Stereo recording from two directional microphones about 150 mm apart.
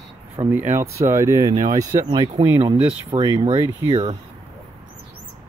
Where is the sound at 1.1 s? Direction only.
20° right (ahead or behind).